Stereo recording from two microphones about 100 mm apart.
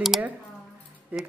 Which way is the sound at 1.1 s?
15° right (ahead or behind).